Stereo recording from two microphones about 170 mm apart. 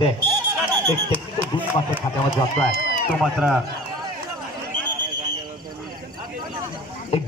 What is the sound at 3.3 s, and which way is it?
Speech, centre (ahead or behind).